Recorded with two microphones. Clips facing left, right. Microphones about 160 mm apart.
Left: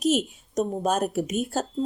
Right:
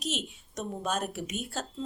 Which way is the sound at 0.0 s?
45° left (ahead or behind).